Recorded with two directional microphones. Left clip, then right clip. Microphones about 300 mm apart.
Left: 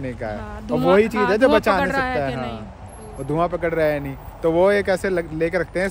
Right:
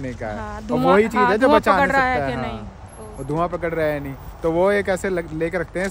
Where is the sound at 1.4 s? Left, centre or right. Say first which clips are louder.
Even; centre.